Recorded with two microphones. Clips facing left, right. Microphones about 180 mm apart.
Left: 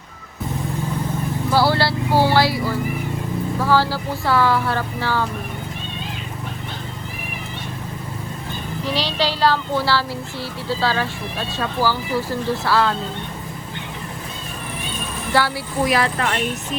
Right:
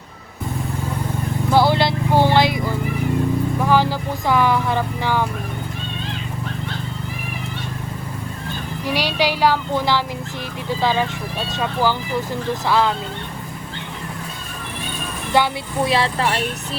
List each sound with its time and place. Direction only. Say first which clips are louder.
1.5 s vehicle: right 2 dB; 20° right (ahead or behind)
3.6 s speech: left 1 dB; 15° right (ahead or behind)
8.8 s speech: right 2 dB; 10° right (ahead or behind)
15.3 s speech: right 2 dB; 20° right (ahead or behind)